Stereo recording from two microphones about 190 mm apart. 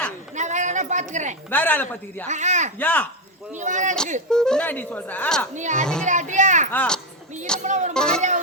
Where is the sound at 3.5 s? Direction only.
40° right (ahead or behind).